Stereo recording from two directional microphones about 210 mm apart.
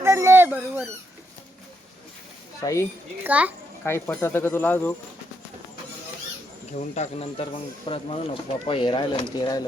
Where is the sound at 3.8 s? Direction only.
10° left (ahead or behind).